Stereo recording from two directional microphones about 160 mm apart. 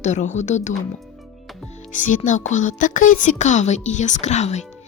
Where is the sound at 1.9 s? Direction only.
55° left (ahead or behind).